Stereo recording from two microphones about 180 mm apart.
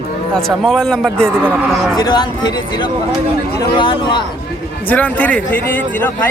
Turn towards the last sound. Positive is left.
turn(degrees=10)  # may be behind; listen again after turning